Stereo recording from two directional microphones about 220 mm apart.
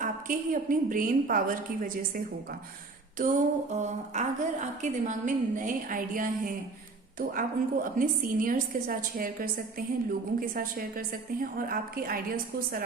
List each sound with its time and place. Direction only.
0.0 s a woman's voice: 35° right (ahead or behind)